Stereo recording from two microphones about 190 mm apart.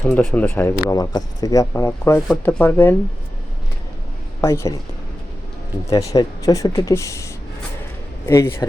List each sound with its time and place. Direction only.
0.0 s speech: 5° left (ahead or behind)
4.4 s speech: 15° left (ahead or behind)
5.9 s speech: 15° left (ahead or behind)
8.3 s speech: 15° left (ahead or behind)